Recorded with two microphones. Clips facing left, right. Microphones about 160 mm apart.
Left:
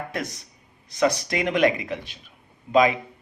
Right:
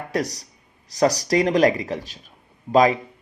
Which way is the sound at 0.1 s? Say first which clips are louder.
Right 6 dB; 40° right (ahead or behind).